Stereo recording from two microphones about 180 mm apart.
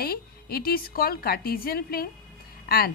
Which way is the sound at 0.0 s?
60° left (ahead or behind).